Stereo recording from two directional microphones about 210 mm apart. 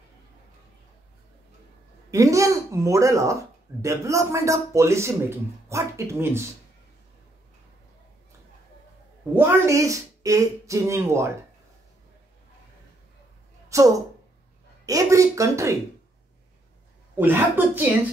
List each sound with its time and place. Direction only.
2.0 s speech: 15° right (ahead or behind)
9.3 s speech: 10° right (ahead or behind)
13.7 s a woman's voice: 15° right (ahead or behind)
17.1 s speech: 10° right (ahead or behind)